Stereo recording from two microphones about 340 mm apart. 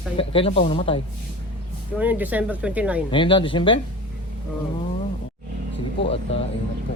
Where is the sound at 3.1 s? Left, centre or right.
Centre.